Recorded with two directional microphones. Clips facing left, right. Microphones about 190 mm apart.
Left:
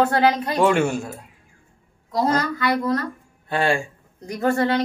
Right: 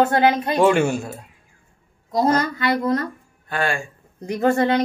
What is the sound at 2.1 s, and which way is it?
Speech, 20° right (ahead or behind).